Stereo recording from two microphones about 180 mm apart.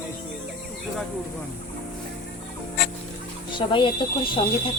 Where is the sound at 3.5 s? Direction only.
25° left (ahead or behind).